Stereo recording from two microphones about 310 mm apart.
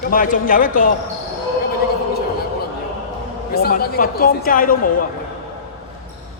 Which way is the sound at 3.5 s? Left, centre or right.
Left.